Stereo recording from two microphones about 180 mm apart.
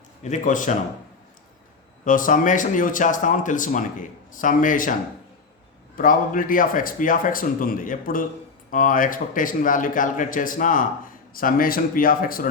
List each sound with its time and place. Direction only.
0.2 s speech: 45° left (ahead or behind)
2.0 s speech: 50° left (ahead or behind)
6.0 s speech: 50° left (ahead or behind)